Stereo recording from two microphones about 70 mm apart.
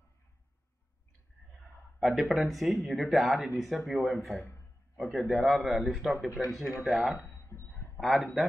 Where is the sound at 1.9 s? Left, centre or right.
Centre.